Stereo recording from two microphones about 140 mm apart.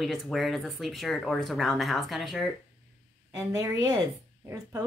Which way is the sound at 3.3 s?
25° right (ahead or behind).